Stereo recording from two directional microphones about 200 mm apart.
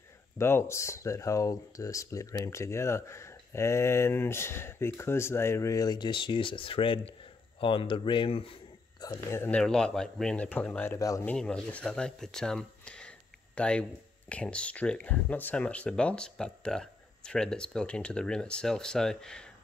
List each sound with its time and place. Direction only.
0.4 s speech: 15° left (ahead or behind)
9.0 s speech: 15° left (ahead or behind)
11.3 s speech: 5° left (ahead or behind)